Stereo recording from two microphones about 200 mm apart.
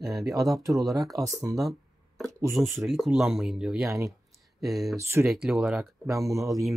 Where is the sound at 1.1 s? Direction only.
15° right (ahead or behind).